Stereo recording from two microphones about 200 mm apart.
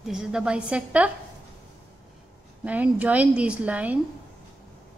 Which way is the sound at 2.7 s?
5° right (ahead or behind).